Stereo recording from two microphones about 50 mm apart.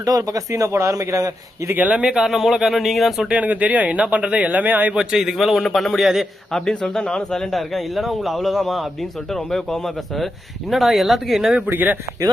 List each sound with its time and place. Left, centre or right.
0.2 s speech: right
1.9 s speech: centre
3.3 s speech: right
4.9 s a man's voice: centre
6.5 s speech: centre
11.7 s speech: right